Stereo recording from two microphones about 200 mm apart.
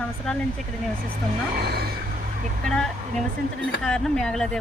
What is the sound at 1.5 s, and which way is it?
Speech, 50° right (ahead or behind).